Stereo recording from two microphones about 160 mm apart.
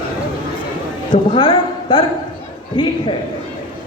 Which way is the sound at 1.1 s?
30° left (ahead or behind).